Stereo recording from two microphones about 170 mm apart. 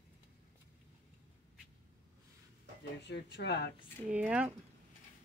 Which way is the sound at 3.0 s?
90° left.